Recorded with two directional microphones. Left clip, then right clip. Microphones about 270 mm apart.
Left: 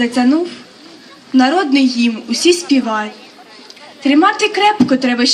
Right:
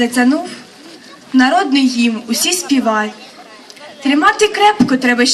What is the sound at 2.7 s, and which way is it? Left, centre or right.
A woman's voice, left.